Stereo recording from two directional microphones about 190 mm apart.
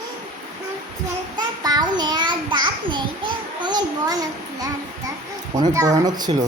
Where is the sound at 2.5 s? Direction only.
25° right (ahead or behind).